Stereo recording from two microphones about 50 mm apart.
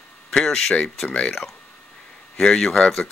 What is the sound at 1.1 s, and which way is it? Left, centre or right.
Speech, left.